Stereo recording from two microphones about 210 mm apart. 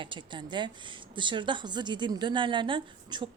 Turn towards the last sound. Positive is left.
turn(degrees=-20)  # may be behind; listen again after turning